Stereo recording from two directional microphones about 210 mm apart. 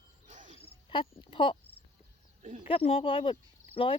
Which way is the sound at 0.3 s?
35° right (ahead or behind).